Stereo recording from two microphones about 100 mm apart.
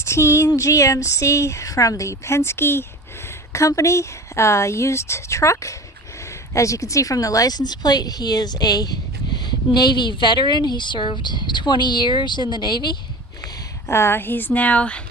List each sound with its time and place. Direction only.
0.0 s speech: 25° left (ahead or behind); by 13.0 s 45° left (ahead or behind)
13.8 s a woman's voice: 25° left (ahead or behind)